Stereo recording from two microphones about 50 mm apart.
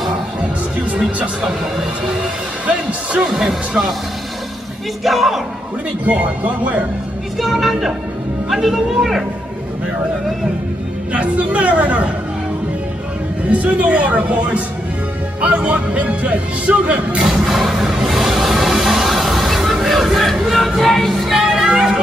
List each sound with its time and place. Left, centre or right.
3.3 s speech: centre
5.0 s a woman's voice: centre
6.0 s speech: right
7.3 s a woman's voice: centre
11.1 s speech: right
13.5 s speech: right
17.3 s a sound: centre
20.4 s music: centre
21.4 s music: centre